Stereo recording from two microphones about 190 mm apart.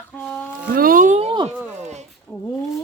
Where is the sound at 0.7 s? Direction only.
50° right (ahead or behind); by 1.5 s 30° right (ahead or behind).